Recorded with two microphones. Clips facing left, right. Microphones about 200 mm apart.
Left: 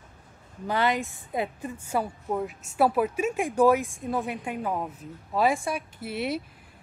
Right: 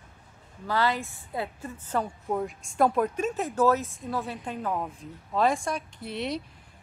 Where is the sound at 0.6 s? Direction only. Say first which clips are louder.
Left 1 dB; 20° left (ahead or behind).